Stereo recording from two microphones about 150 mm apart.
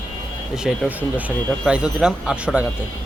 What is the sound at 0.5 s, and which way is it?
Speech, 5° right (ahead or behind).